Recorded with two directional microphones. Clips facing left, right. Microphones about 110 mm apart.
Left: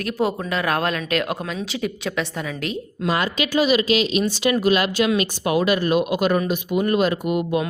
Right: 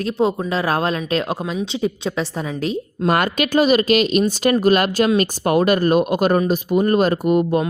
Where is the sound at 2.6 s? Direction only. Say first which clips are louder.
Right 5 dB; 35° right (ahead or behind).